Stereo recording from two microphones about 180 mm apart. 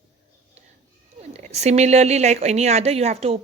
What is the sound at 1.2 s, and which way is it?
Speech, 35° right (ahead or behind).